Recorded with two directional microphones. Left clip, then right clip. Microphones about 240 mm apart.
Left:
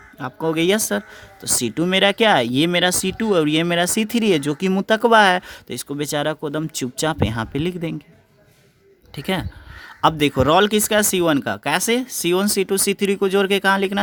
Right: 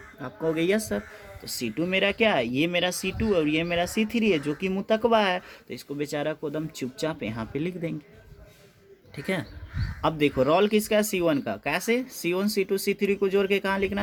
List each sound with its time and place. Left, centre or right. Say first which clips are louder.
0.2 s speech: left 6 dB; left
9.1 s speech: left 6 dB; left